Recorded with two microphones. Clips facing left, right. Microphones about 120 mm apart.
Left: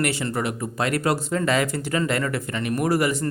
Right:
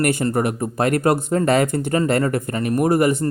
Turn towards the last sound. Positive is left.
turn(degrees=-45)  # may be behind; listen again after turning